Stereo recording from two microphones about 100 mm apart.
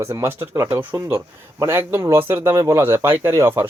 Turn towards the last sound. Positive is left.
turn(degrees=-25)  # may be behind; listen again after turning